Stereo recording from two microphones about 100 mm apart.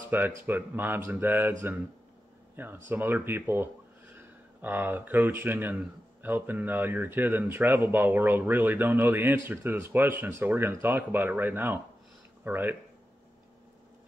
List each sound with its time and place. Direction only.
0.1 s speech: 20° right (ahead or behind)
2.5 s speech: 20° right (ahead or behind)